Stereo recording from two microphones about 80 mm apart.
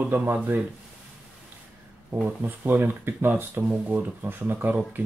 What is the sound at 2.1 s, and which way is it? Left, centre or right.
Speech, right.